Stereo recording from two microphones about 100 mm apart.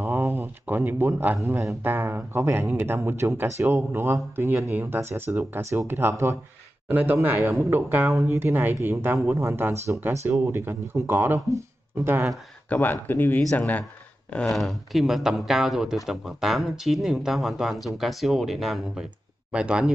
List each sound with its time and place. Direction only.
0.0 s a sound: 20° right (ahead or behind)
1.8 s speech: 20° right (ahead or behind)
12.6 s speech: 15° left (ahead or behind)
14.5 s speech: centre (ahead or behind)